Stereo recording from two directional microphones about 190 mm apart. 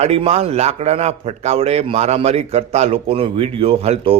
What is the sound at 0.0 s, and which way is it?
A man's voice, 30° right (ahead or behind).